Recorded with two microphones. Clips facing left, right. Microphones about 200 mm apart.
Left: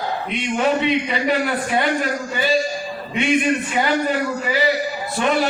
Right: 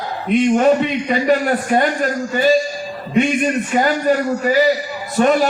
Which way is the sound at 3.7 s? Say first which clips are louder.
Right 4 dB; 45° right (ahead or behind).